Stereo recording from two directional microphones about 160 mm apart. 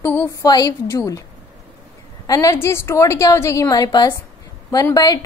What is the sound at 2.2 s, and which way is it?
A woman's voice, 20° left (ahead or behind).